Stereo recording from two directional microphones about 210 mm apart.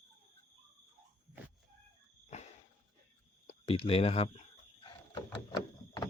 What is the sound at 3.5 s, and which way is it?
Speech, 25° left (ahead or behind).